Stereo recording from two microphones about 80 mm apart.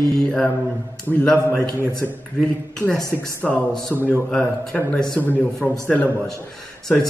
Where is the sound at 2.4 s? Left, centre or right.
Centre.